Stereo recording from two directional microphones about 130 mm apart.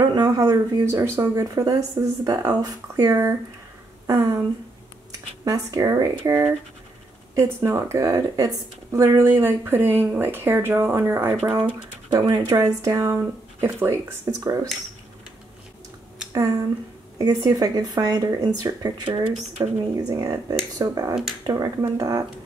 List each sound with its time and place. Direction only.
0.0 s speech: 35° right (ahead or behind)
5.4 s speech: 30° right (ahead or behind); by 11.7 s 15° right (ahead or behind)
12.1 s speech: 35° right (ahead or behind)
16.3 s speech: 25° right (ahead or behind)
21.1 s speech: 5° right (ahead or behind)
21.5 s speech: 30° right (ahead or behind)